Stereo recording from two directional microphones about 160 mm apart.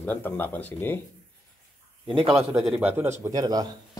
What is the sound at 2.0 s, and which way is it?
Speech, centre (ahead or behind).